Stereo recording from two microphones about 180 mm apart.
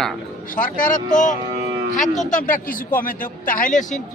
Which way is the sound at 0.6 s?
50° left (ahead or behind).